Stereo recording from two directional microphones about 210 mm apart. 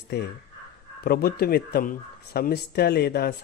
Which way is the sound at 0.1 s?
50° left (ahead or behind).